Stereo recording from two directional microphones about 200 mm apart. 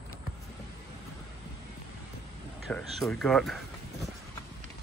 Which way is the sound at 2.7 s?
Centre (ahead or behind).